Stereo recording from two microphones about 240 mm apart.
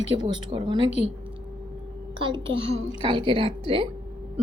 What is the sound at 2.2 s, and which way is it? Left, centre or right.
A child's voice, right.